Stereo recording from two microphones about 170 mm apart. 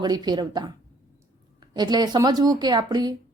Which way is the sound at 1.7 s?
25° right (ahead or behind).